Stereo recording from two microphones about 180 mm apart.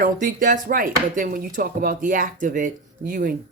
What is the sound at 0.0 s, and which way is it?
Speech, 50° right (ahead or behind).